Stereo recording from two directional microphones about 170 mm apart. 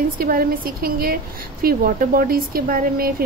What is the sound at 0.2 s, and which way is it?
A woman's voice, 60° right (ahead or behind).